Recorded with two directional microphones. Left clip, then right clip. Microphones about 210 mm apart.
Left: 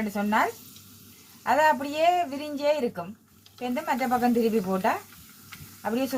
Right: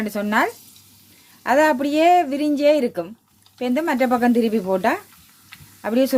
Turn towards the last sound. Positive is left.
turn(degrees=-50)  # may be behind; listen again after turning